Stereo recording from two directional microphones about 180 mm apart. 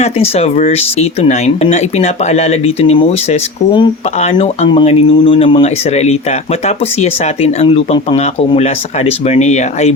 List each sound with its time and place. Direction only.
0.0 s speech: 35° left (ahead or behind)
7.0 s speech: 35° left (ahead or behind)